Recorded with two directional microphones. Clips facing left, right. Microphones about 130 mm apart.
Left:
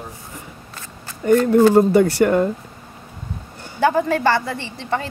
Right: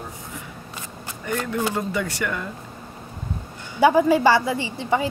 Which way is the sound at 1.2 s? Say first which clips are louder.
Left 12 dB; 40° left (ahead or behind).